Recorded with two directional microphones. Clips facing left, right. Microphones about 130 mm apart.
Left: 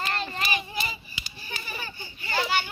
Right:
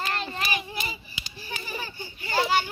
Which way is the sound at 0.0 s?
Centre (ahead or behind).